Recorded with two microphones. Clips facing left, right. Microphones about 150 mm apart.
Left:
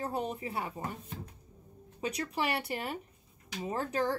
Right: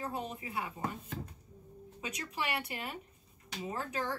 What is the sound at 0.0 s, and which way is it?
Speech, 35° left (ahead or behind).